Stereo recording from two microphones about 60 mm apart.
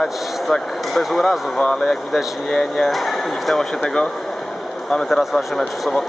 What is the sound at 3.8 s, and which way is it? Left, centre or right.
Speech, centre.